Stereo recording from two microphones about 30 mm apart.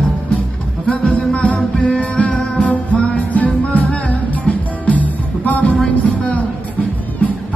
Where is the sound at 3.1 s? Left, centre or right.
Left.